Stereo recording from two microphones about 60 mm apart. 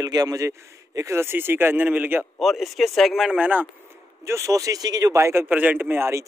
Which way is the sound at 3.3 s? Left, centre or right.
Right.